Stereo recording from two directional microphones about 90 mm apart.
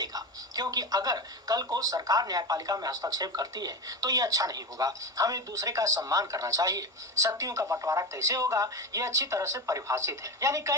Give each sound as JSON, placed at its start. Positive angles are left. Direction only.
{"t": 0.0, "sound": "a woman's voice", "side_deg": -45}